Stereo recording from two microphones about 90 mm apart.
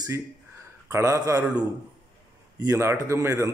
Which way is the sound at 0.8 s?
35° right (ahead or behind).